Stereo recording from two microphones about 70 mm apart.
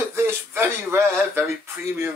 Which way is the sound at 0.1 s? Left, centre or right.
Right.